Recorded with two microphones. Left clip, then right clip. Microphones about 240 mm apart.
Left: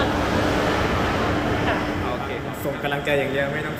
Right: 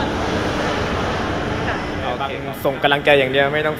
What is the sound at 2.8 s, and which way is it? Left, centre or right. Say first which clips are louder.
Speech: right 9 dB; centre.